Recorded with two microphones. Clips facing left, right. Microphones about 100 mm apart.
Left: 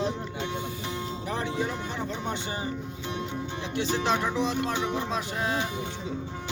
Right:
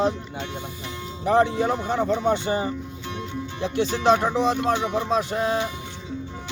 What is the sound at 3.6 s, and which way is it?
Music, 40° right (ahead or behind).